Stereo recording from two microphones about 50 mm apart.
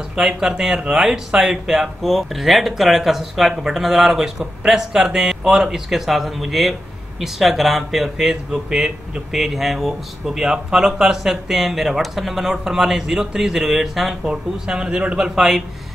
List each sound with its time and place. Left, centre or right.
0.1 s speech: centre
14.2 s speech: centre